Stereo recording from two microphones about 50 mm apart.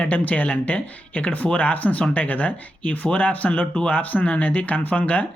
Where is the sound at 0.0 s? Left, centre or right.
Left.